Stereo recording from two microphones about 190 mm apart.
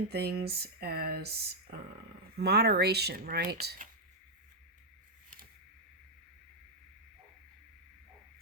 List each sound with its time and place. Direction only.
0.1 s speech: 60° right (ahead or behind)